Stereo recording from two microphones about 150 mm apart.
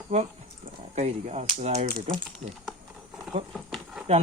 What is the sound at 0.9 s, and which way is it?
Speech, 45° right (ahead or behind).